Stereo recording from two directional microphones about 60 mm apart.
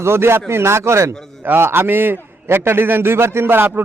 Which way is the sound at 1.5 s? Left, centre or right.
Right.